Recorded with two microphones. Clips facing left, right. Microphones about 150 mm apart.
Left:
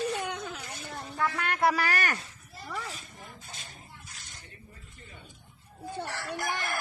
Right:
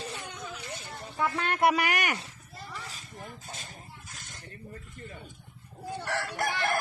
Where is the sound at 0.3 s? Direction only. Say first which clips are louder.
Left 5 dB; 60° left (ahead or behind).